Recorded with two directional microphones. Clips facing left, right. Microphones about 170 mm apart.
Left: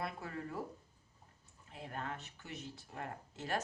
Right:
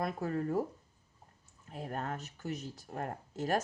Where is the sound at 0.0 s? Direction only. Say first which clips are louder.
Right 8 dB; 40° right (ahead or behind).